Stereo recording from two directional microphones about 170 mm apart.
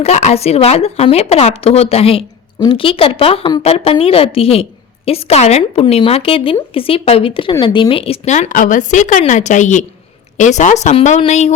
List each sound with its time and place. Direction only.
0.0 s a woman's voice: 40° left (ahead or behind)